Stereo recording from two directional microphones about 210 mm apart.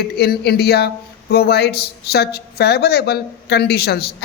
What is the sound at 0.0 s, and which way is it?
A man's voice, 50° left (ahead or behind).